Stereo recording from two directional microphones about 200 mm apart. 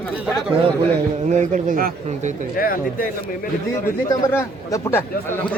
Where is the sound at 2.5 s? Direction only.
45° left (ahead or behind).